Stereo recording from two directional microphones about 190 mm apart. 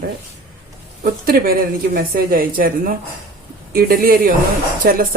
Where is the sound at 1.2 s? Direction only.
50° right (ahead or behind).